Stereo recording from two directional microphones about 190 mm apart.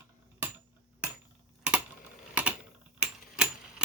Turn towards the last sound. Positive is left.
turn(degrees=-5)  # may be behind; listen again after turning